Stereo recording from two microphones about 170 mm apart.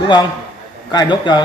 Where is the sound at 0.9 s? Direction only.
25° left (ahead or behind).